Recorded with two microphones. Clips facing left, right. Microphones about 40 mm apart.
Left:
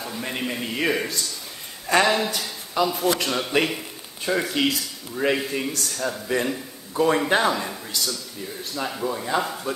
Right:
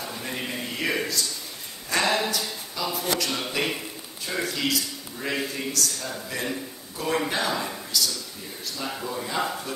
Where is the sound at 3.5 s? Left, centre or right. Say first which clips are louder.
Left 5 dB; left.